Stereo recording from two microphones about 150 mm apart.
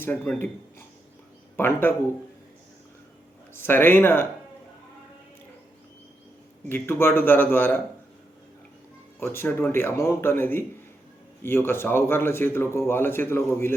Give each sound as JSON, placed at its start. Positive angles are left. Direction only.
{"t": 0.0, "sound": "speech", "side_deg": 15}
{"t": 1.5, "sound": "speech", "side_deg": 15}
{"t": 3.5, "sound": "speech", "side_deg": 15}
{"t": 6.7, "sound": "speech", "side_deg": 15}
{"t": 9.2, "sound": "speech", "side_deg": 15}